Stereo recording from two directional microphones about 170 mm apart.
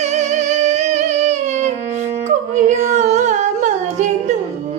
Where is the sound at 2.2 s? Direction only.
45° right (ahead or behind).